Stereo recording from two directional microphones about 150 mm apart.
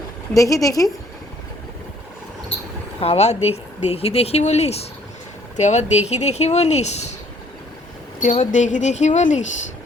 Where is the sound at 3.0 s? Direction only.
45° left (ahead or behind).